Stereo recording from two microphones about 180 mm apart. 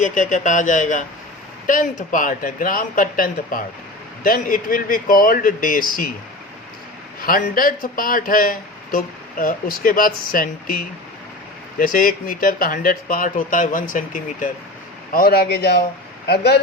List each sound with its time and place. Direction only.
0.0 s speech: 45° left (ahead or behind)
7.2 s speech: 50° left (ahead or behind)
15.1 s a man's voice: 55° left (ahead or behind)